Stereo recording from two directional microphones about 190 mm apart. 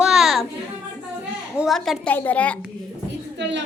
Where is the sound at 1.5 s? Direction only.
Centre (ahead or behind).